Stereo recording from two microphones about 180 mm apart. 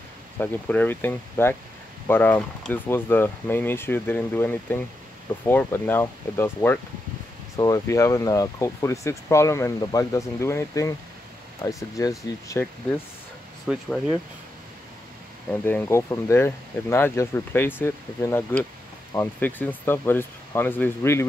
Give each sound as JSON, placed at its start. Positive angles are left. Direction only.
{"t": 0.4, "sound": "speech", "side_deg": 10}
{"t": 13.7, "sound": "speech", "side_deg": 0}
{"t": 15.5, "sound": "speech", "side_deg": 10}